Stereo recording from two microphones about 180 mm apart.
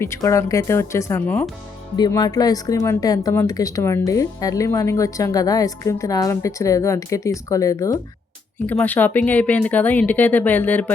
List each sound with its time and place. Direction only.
0.0 s speech: 15° left (ahead or behind)